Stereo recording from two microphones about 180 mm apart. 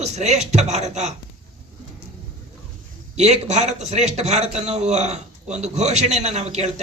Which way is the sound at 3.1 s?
40° right (ahead or behind).